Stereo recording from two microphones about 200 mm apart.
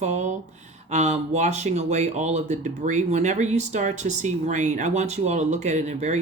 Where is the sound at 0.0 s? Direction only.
35° right (ahead or behind).